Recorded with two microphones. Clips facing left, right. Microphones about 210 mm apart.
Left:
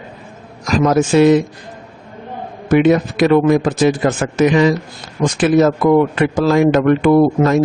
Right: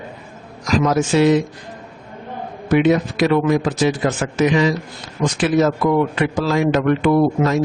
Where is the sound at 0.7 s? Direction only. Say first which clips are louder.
Left 4 dB; 50° left (ahead or behind).